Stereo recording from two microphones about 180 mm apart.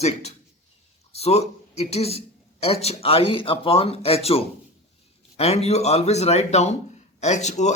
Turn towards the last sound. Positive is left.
turn(degrees=40)  # may be behind; listen again after turning